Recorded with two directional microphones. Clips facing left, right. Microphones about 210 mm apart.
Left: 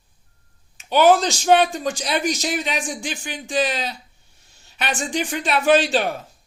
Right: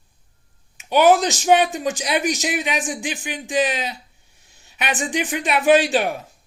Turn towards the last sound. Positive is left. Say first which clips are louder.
# right 1 dB
turn(degrees=-15)  # may be behind; listen again after turning